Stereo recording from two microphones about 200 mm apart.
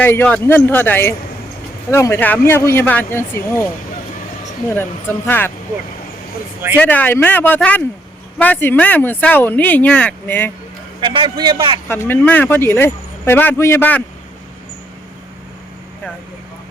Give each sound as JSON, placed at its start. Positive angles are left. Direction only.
{"t": 0.0, "sound": "speech", "side_deg": 10}
{"t": 4.7, "sound": "speech", "side_deg": 10}
{"t": 6.7, "sound": "speech", "side_deg": 10}
{"t": 11.1, "sound": "a man's voice", "side_deg": -25}
{"t": 11.9, "sound": "speech", "side_deg": 10}